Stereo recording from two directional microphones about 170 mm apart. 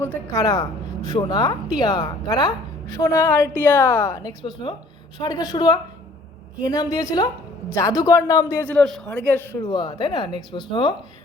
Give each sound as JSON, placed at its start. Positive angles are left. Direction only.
{"t": 0.0, "sound": "a woman's voice", "side_deg": 20}
{"t": 6.9, "sound": "a woman's voice", "side_deg": 20}
{"t": 9.6, "sound": "a woman's voice", "side_deg": 25}